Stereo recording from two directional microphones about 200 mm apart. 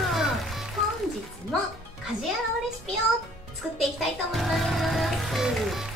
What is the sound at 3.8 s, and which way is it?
Music, centre (ahead or behind).